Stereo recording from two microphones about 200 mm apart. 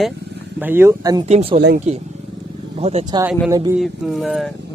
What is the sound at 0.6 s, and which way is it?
Speech, 10° right (ahead or behind).